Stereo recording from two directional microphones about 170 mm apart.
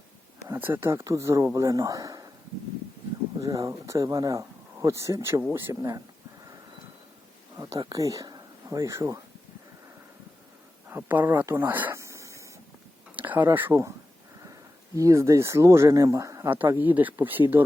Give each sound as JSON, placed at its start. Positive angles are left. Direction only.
{"t": 0.4, "sound": "speech", "side_deg": -10}
{"t": 3.4, "sound": "speech", "side_deg": -20}
{"t": 7.5, "sound": "speech", "side_deg": -20}
{"t": 10.8, "sound": "a sound", "side_deg": -10}
{"t": 13.1, "sound": "speech", "side_deg": -10}